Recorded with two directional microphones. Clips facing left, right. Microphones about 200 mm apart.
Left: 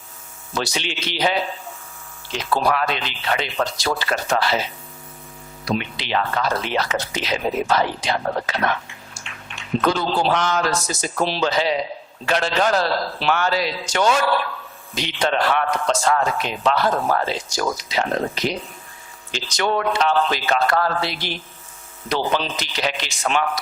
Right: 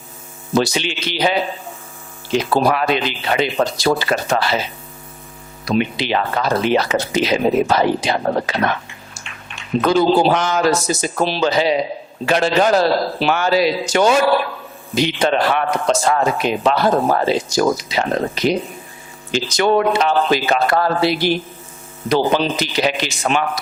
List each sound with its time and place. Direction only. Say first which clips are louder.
0.5 s a man's voice: right 8 dB; 5° right (ahead or behind)
5.7 s a man's voice: right 5 dB; 10° right (ahead or behind)
9.9 s a man's voice: right 11 dB; 10° right (ahead or behind)